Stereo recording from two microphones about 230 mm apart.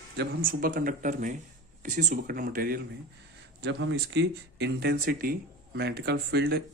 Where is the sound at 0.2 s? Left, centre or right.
Right.